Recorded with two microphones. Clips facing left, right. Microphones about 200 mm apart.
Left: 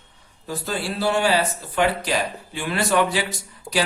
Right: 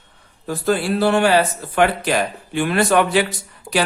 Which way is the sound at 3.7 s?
5° right (ahead or behind).